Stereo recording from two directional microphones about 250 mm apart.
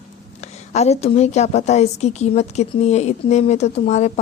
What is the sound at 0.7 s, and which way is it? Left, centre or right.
A woman's voice, left.